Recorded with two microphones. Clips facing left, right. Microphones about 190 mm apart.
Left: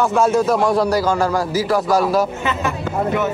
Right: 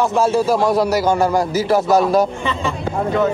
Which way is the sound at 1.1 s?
20° right (ahead or behind).